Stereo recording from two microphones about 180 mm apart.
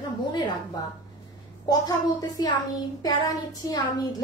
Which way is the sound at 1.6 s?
20° left (ahead or behind).